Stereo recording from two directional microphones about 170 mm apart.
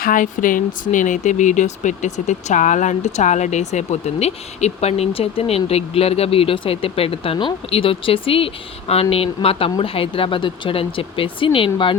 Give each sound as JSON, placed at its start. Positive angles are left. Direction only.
{"t": 0.0, "sound": "speech", "side_deg": 50}